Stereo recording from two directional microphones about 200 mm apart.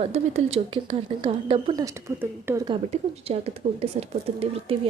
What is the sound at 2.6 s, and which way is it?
A woman's voice, 30° right (ahead or behind).